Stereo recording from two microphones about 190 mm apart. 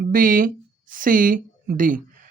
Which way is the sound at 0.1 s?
45° right (ahead or behind).